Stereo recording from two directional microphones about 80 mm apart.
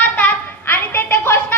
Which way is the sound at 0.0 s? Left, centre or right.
Left.